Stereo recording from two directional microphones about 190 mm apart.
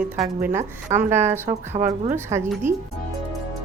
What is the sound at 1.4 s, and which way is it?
Speech, 40° right (ahead or behind).